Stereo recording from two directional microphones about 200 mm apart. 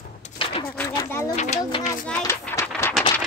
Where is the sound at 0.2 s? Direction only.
25° left (ahead or behind).